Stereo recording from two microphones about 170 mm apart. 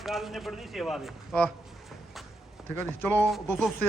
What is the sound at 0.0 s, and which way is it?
A man's voice, centre (ahead or behind).